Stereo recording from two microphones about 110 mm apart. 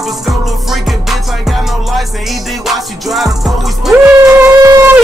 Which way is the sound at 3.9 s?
25° right (ahead or behind).